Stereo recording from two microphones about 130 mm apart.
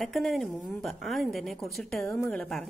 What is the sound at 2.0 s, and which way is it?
Speech, 20° left (ahead or behind).